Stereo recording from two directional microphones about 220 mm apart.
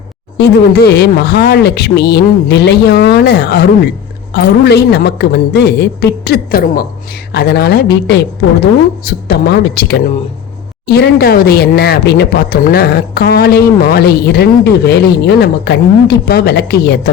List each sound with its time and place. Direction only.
0.3 s speech: 50° left (ahead or behind)